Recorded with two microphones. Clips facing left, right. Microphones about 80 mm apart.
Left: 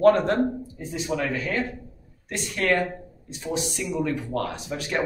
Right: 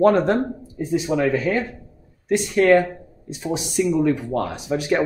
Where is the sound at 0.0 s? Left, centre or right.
Centre.